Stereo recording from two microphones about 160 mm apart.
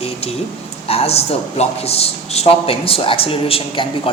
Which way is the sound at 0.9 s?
40° left (ahead or behind).